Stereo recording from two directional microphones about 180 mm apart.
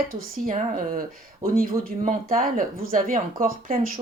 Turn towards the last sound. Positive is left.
turn(degrees=-35)  # may be behind; listen again after turning